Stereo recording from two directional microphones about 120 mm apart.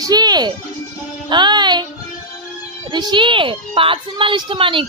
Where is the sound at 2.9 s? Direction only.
40° right (ahead or behind).